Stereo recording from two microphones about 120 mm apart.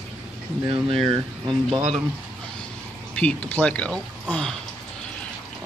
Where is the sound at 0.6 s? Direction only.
45° right (ahead or behind).